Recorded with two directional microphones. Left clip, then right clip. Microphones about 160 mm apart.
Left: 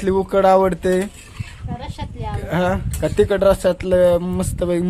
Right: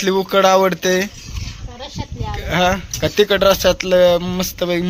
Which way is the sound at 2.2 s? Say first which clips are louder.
Right 4 dB; 15° left (ahead or behind).